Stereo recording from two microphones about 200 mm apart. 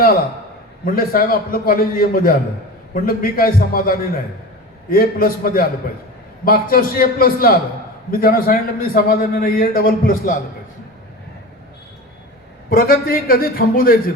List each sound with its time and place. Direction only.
0.9 s a man's voice: 45° left (ahead or behind)
12.7 s a man's voice: 45° left (ahead or behind)